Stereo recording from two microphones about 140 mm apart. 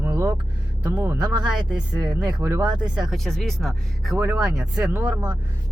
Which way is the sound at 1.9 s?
30° right (ahead or behind).